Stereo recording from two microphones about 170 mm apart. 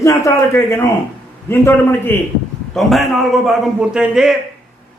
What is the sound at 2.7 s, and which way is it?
A man's voice, centre (ahead or behind).